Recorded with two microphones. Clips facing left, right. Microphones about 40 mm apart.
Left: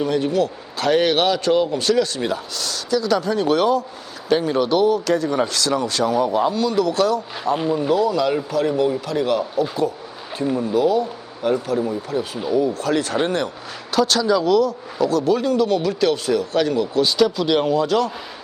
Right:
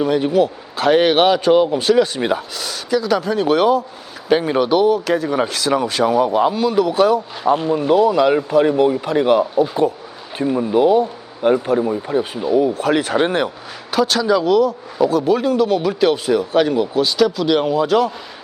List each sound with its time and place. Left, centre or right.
0.0 s a man's voice: centre
13.9 s a man's voice: centre
17.0 s speech: centre